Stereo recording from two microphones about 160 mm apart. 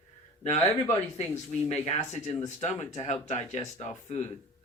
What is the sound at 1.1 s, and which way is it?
Speech, 45° left (ahead or behind).